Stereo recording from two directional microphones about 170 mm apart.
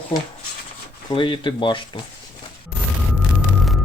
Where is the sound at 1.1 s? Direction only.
30° left (ahead or behind).